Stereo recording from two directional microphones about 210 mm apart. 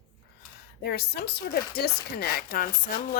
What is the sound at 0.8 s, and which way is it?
Speech, 50° left (ahead or behind).